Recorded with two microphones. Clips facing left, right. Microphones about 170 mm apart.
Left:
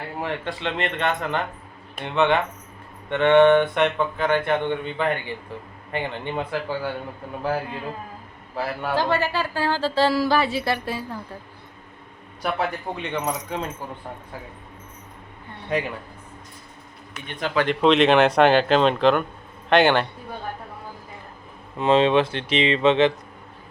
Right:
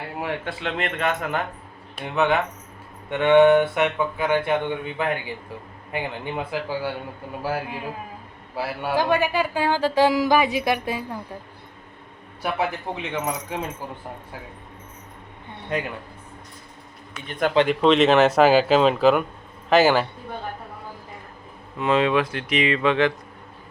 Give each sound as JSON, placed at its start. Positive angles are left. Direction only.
{"t": 0.2, "sound": "speech", "side_deg": -5}
{"t": 12.4, "sound": "speech", "side_deg": -5}
{"t": 17.7, "sound": "speech", "side_deg": 0}
{"t": 21.8, "sound": "speech", "side_deg": 25}